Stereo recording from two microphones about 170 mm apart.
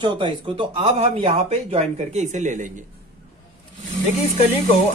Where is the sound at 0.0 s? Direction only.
30° right (ahead or behind); by 2.7 s 45° right (ahead or behind).